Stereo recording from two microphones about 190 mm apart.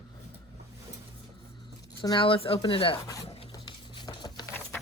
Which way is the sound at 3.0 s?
15° left (ahead or behind).